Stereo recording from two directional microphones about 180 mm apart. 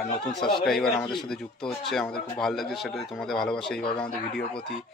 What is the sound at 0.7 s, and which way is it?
Speech, 5° left (ahead or behind).